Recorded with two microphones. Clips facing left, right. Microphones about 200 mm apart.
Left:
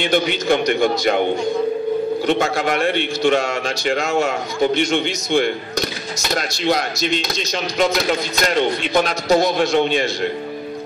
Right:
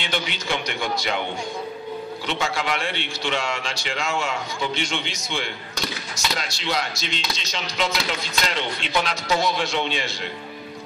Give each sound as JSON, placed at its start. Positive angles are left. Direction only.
{"t": 0.0, "sound": "speech", "side_deg": 50}
{"t": 2.2, "sound": "speech", "side_deg": 50}